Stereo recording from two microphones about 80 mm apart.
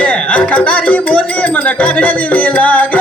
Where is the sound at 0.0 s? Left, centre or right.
Centre.